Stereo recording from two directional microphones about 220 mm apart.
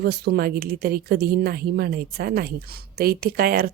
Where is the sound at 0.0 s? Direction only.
45° right (ahead or behind).